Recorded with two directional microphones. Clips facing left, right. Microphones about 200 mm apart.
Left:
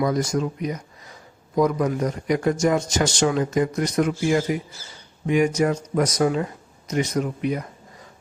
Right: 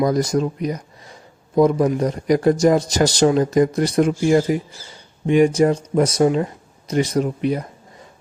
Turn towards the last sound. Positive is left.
turn(degrees=-30)  # may be behind; listen again after turning